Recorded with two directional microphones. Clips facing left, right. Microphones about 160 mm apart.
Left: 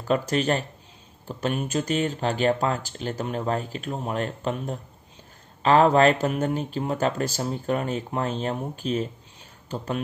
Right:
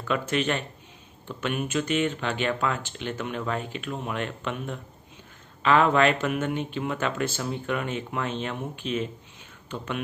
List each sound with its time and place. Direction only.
0.0 s speech: 35° left (ahead or behind)